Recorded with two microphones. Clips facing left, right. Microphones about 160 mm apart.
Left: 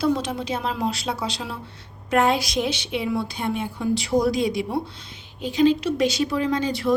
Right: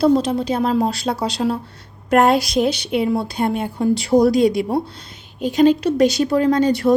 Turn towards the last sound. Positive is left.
turn(degrees=-40)  # may be behind; listen again after turning